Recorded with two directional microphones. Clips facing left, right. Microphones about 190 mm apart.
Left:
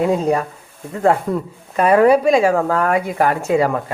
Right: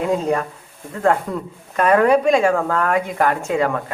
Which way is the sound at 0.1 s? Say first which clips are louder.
Left 2 dB; 10° left (ahead or behind).